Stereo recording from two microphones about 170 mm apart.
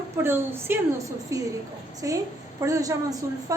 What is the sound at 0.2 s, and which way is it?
A woman's voice, 15° right (ahead or behind).